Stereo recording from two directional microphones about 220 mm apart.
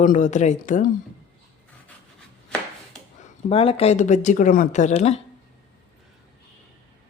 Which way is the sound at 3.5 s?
25° left (ahead or behind).